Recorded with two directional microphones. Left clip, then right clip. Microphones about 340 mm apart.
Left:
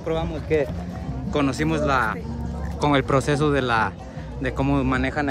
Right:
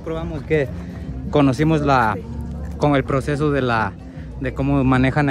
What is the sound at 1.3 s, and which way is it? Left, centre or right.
Speech, centre.